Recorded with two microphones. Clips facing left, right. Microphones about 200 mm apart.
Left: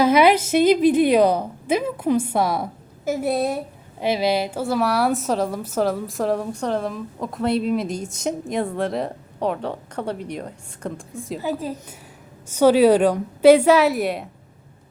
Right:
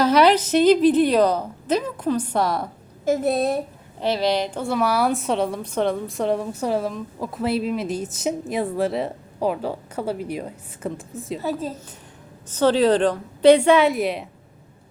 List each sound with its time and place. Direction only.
0.0 s a woman's voice: 10° left (ahead or behind)
11.4 s a woman's voice: 10° left (ahead or behind)